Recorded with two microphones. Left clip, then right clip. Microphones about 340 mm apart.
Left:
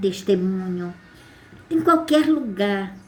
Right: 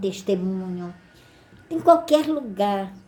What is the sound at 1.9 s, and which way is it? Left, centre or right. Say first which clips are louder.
Speech: right 2 dB; centre.